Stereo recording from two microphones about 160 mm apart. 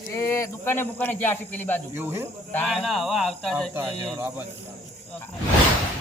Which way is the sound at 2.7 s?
Centre (ahead or behind).